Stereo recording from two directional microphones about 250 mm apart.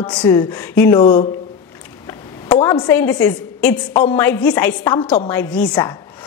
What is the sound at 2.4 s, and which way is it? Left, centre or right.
A woman's voice, centre.